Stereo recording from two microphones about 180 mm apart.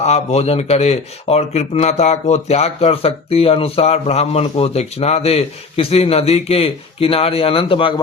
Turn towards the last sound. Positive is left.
turn(degrees=30)  # may be behind; listen again after turning